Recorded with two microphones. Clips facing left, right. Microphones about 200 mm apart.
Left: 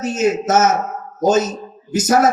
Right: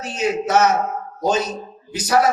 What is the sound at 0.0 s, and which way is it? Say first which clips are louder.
Speech: left 4 dB; 45° left (ahead or behind).